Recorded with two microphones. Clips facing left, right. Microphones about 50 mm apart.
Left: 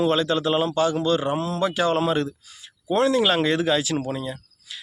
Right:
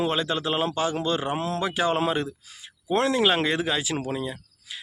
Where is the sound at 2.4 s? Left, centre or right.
Right.